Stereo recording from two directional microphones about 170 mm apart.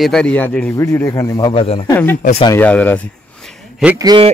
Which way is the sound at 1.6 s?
35° left (ahead or behind).